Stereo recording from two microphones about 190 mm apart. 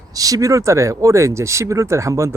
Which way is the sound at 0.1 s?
20° right (ahead or behind).